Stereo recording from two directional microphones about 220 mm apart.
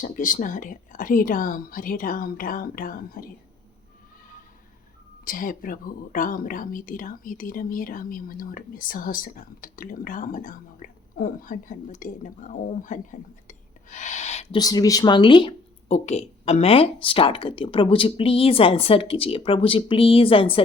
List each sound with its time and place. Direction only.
0.0 s speech: 35° left (ahead or behind)
5.2 s speech: 40° left (ahead or behind)
14.6 s speech: 15° left (ahead or behind)